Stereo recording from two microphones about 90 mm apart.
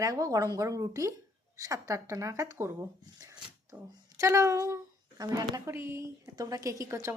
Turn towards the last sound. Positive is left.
turn(degrees=-30)  # may be behind; listen again after turning